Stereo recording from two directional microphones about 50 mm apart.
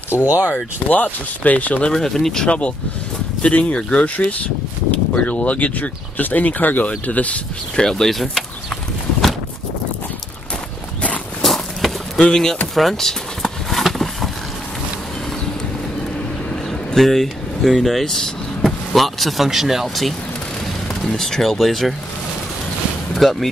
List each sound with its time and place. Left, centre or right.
0.1 s speech: left
0.8 s speech: left
1.9 s speech: centre; by 7.3 s left
7.7 s speech: centre
11.4 s a sound: centre
12.2 s speech: centre
12.7 s a sound: centre
16.9 s speech: centre
23.1 s speech: centre